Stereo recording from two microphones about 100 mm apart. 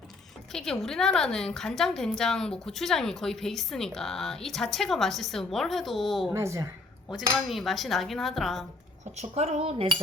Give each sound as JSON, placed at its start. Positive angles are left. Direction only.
{"t": 0.5, "sound": "a woman's voice", "side_deg": 5}
{"t": 6.3, "sound": "a woman's voice", "side_deg": -30}
{"t": 7.3, "sound": "a woman's voice", "side_deg": 0}
{"t": 9.1, "sound": "cutlery", "side_deg": -90}